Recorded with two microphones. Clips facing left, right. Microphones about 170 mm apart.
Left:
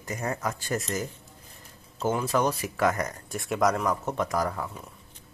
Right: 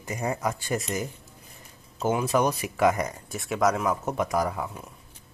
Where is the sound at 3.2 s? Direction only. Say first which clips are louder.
Even; centre (ahead or behind).